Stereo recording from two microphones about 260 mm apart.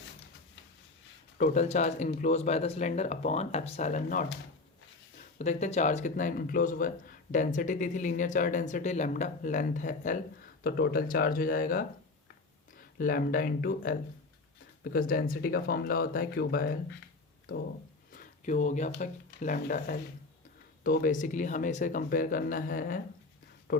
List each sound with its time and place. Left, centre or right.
1.4 s speech: left
5.4 s speech: left
13.0 s speech: left
14.9 s speech: left
18.1 s a sound: left
18.9 s speech: left